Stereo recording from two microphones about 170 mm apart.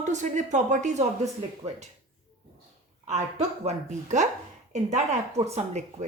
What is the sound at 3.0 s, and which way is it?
A woman's voice, 40° right (ahead or behind).